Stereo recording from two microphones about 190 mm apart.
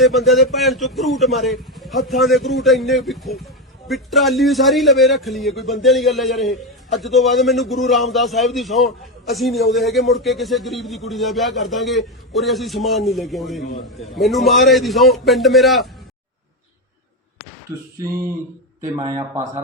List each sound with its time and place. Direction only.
0.0 s a man's voice: centre (ahead or behind)
17.9 s speech: 15° right (ahead or behind)